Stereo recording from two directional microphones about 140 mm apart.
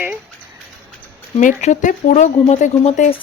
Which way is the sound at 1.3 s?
60° left (ahead or behind).